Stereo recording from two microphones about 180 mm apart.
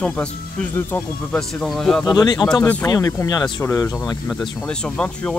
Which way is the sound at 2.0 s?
20° left (ahead or behind).